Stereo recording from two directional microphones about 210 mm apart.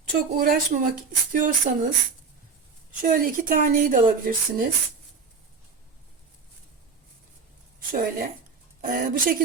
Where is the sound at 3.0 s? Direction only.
40° right (ahead or behind).